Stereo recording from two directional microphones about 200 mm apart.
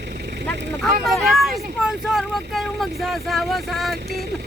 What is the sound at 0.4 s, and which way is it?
Speech, centre (ahead or behind).